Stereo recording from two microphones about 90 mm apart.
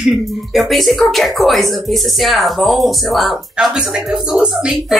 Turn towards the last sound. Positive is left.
turn(degrees=-10)  # may be behind; listen again after turning